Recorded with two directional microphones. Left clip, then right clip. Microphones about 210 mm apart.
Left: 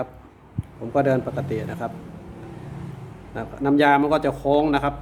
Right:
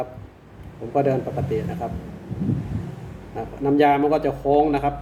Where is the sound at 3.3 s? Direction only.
35° left (ahead or behind).